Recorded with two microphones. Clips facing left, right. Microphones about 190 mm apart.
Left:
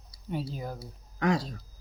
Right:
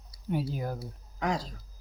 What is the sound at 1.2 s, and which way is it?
Speech, 65° left (ahead or behind).